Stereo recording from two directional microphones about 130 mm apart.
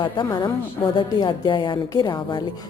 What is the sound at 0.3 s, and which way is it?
A woman's voice, 35° left (ahead or behind).